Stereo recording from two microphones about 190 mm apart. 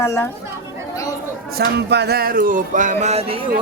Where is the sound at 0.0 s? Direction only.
15° left (ahead or behind).